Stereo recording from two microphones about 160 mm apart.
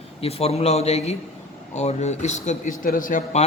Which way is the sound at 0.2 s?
40° left (ahead or behind).